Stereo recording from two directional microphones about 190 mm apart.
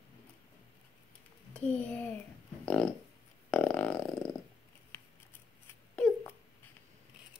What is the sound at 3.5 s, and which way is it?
Burping, 5° left (ahead or behind).